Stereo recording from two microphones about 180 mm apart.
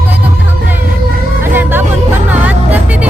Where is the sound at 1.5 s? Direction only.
10° right (ahead or behind).